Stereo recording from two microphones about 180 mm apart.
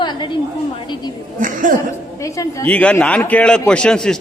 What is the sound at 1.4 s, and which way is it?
Speech, 45° right (ahead or behind).